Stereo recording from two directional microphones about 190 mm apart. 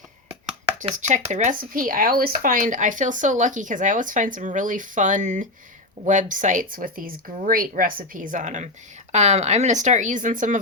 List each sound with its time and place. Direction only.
0.8 s speech: 40° right (ahead or behind)